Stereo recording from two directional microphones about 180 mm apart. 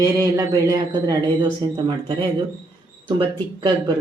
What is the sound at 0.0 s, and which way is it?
Speech, 20° right (ahead or behind).